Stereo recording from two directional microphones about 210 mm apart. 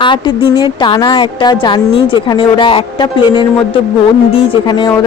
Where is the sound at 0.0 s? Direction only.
20° left (ahead or behind).